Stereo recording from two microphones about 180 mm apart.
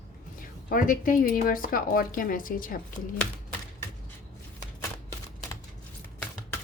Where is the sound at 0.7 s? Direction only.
50° left (ahead or behind).